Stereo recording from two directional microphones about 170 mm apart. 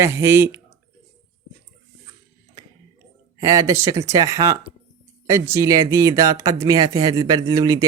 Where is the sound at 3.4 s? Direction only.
20° right (ahead or behind).